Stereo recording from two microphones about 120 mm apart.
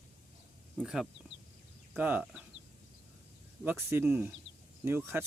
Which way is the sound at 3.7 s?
20° right (ahead or behind).